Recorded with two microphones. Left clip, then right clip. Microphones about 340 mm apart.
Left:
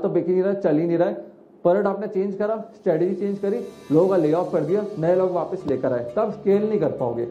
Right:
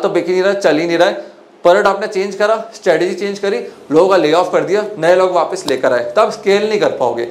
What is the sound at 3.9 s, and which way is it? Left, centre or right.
Speech, centre.